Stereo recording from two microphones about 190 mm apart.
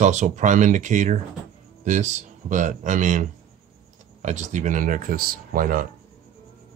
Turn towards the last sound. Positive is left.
turn(degrees=-50)  # may be behind; listen again after turning